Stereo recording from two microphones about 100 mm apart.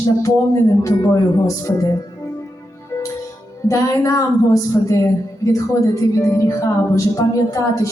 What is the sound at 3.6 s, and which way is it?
A woman's voice, 35° left (ahead or behind).